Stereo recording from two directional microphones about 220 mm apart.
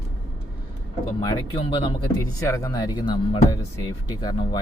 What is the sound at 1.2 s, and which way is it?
Speech, 20° left (ahead or behind).